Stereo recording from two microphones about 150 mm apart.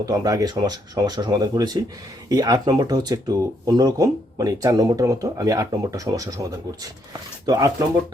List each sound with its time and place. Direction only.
0.0 s speech: 25° right (ahead or behind)